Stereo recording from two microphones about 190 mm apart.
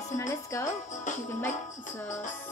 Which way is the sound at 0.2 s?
15° left (ahead or behind).